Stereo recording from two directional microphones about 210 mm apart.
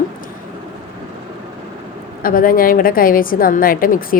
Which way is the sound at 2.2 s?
45° left (ahead or behind).